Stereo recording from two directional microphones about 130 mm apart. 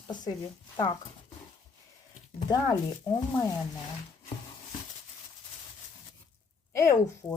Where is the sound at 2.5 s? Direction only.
25° left (ahead or behind).